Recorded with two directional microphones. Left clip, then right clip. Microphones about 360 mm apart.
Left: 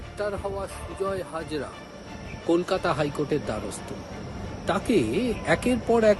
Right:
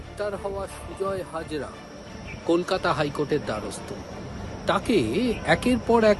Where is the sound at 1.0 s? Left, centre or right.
Centre.